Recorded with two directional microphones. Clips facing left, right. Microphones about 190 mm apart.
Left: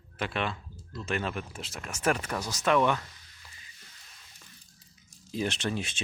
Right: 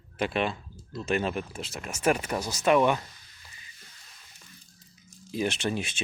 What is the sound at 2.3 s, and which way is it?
Speech, 30° right (ahead or behind).